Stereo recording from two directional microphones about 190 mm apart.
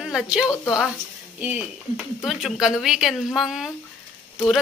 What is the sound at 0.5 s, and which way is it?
Speech, 15° left (ahead or behind).